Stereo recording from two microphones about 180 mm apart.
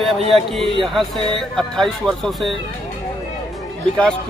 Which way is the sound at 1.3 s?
Centre (ahead or behind).